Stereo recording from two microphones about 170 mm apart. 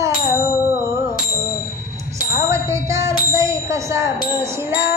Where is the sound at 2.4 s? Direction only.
15° right (ahead or behind).